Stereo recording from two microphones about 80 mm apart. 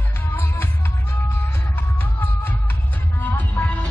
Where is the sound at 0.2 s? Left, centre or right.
Left.